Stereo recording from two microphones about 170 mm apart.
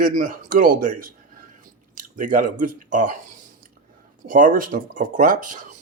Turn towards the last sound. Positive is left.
turn(degrees=-50)  # may be behind; listen again after turning